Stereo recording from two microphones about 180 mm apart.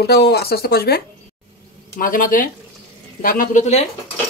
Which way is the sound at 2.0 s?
50° left (ahead or behind).